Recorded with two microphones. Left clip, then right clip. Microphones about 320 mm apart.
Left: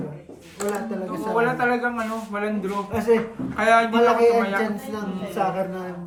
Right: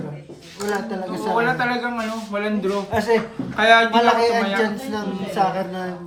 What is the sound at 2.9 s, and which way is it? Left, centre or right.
Speech, right.